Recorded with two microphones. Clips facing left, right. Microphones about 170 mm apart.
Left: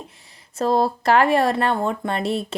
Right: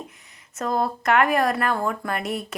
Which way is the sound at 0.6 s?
30° left (ahead or behind).